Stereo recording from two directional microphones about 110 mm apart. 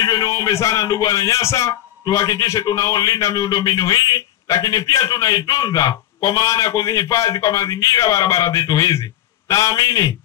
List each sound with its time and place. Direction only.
0.0 s a man's voice: 35° left (ahead or behind)